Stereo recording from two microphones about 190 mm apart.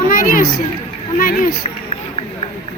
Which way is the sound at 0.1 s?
50° left (ahead or behind).